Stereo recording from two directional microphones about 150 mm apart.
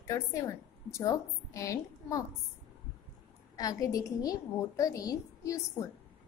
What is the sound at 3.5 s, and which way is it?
A woman's voice, 25° left (ahead or behind).